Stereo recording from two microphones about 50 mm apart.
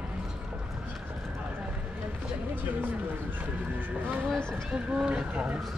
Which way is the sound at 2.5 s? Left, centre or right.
Right.